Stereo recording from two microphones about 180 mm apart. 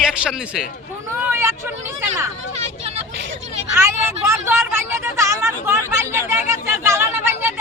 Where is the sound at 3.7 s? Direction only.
15° right (ahead or behind).